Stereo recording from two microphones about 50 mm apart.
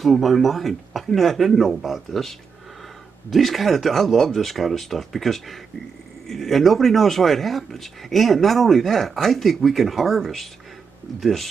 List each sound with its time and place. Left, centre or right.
0.0 s speech: centre